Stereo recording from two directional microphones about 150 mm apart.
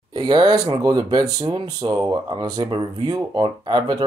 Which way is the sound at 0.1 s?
25° right (ahead or behind).